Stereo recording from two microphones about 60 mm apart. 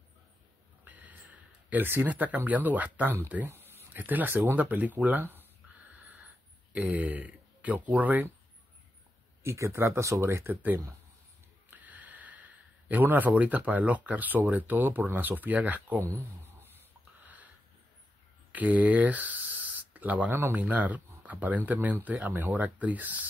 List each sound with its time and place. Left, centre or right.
0.8 s a sound: right
1.3 s speech: right
6.7 s speech: right
9.4 s speech: right
17.2 s a sound: right
18.5 s speech: right